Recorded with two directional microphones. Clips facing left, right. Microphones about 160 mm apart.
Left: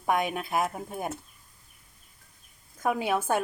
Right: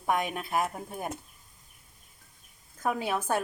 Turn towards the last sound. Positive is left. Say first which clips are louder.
# left 3 dB
turn(degrees=10)  # may be behind; listen again after turning